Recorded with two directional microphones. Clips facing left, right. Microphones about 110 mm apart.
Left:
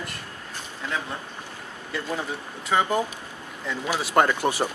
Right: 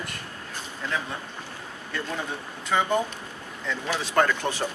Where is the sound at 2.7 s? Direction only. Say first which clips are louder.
Left 1 dB; 5° left (ahead or behind).